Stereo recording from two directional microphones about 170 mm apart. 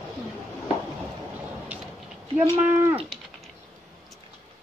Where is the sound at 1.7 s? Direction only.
10° right (ahead or behind).